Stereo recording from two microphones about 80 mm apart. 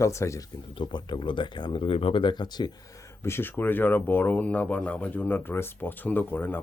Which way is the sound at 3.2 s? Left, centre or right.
Left.